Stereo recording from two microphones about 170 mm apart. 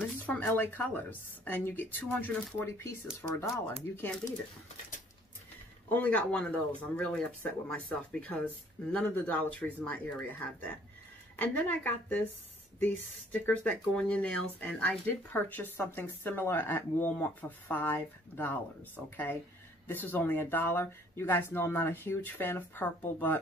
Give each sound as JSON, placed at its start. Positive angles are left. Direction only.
{"t": 0.3, "sound": "speech", "side_deg": 10}
{"t": 5.9, "sound": "speech", "side_deg": 10}